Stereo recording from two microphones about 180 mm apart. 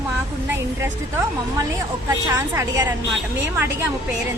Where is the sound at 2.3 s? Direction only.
20° right (ahead or behind).